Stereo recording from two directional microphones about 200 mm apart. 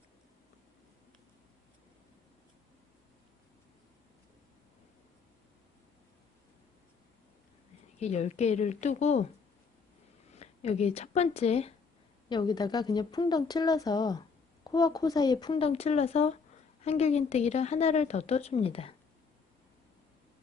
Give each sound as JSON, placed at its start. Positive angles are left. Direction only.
{"t": 7.9, "sound": "a woman's voice", "side_deg": 35}
{"t": 10.3, "sound": "a woman's voice", "side_deg": 30}